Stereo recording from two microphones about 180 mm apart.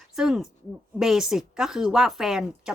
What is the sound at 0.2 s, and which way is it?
A woman's voice, 5° right (ahead or behind).